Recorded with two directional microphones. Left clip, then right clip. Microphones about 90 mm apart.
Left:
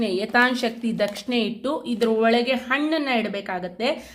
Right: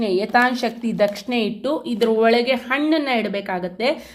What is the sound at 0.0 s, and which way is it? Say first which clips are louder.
A woman's voice: right 3 dB; 10° right (ahead or behind).